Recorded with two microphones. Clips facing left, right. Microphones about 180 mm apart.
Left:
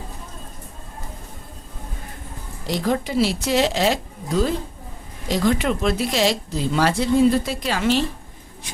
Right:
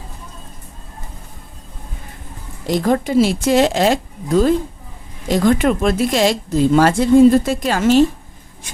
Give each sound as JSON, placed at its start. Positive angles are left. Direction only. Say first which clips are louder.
{"t": 2.6, "sound": "a woman's voice", "louder": "right 6 dB", "side_deg": -50}